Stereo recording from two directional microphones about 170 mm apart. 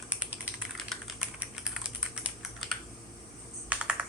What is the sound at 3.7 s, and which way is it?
Computer keyboard, 5° right (ahead or behind).